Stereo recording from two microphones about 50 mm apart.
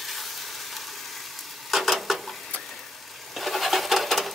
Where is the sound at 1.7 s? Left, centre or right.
Centre.